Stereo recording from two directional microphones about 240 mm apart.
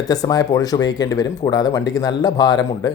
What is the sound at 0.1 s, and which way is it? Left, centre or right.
Speech, centre.